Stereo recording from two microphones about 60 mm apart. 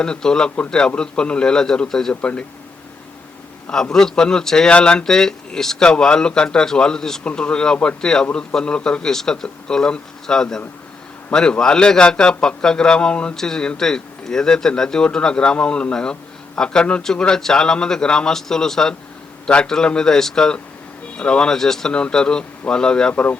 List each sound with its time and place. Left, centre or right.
0.0 s a man's voice: centre
3.7 s a man's voice: centre